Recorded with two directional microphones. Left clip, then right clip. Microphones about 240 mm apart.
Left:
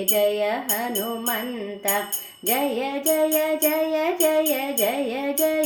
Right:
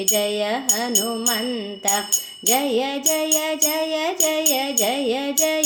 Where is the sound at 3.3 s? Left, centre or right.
Right.